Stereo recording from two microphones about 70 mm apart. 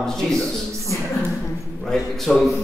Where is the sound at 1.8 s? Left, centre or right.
Centre.